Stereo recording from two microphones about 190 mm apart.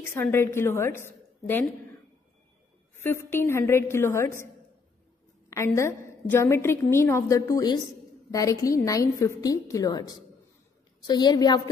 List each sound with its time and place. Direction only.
0.0 s a woman's voice: 10° left (ahead or behind)
3.0 s a woman's voice: 10° left (ahead or behind)
5.8 s a woman's voice: 15° left (ahead or behind)